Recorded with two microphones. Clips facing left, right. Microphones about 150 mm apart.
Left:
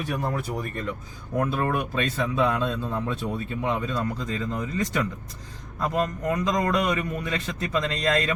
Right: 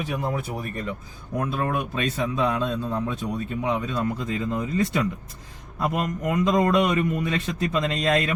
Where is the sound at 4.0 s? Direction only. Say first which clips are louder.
Right 2 dB; 15° right (ahead or behind).